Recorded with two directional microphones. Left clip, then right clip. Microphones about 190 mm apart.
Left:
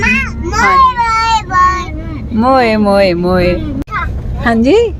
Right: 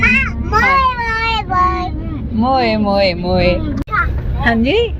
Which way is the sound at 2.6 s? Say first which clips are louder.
Left 4 dB; 90° left.